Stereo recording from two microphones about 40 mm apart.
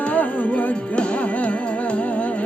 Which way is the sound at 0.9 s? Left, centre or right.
Left.